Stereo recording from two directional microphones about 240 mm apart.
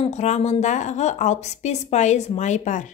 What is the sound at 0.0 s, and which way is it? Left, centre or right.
A woman's voice, left.